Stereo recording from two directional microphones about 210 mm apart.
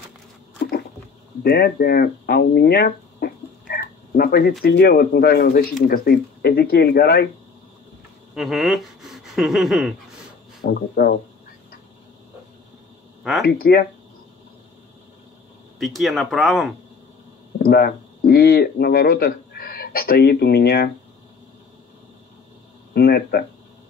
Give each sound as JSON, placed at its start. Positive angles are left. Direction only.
{"t": 1.4, "sound": "speech", "side_deg": 50}
{"t": 8.4, "sound": "speech", "side_deg": 0}
{"t": 10.6, "sound": "speech", "side_deg": 45}
{"t": 13.2, "sound": "speech", "side_deg": 0}
{"t": 13.5, "sound": "speech", "side_deg": 45}
{"t": 15.8, "sound": "speech", "side_deg": 0}
{"t": 17.6, "sound": "speech", "side_deg": 45}
{"t": 22.9, "sound": "speech", "side_deg": 50}